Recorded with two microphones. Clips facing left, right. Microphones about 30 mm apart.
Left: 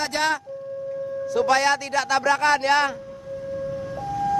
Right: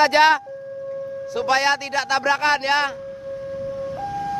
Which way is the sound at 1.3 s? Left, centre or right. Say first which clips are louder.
Even; centre.